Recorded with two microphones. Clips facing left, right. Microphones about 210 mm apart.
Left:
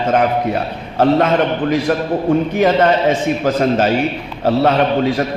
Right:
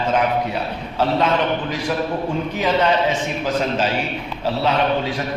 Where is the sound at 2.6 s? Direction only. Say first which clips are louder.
Left 2 dB; 55° left (ahead or behind).